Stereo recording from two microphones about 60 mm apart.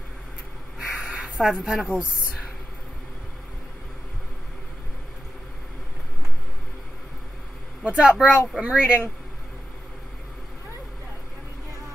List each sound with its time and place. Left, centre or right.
0.7 s crow: centre
1.4 s a woman's voice: centre
7.8 s speech: centre